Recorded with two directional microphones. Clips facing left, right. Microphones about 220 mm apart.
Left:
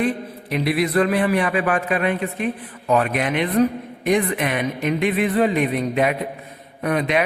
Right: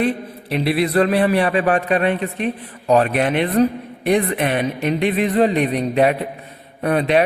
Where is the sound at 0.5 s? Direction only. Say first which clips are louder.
Right 2 dB; 30° right (ahead or behind).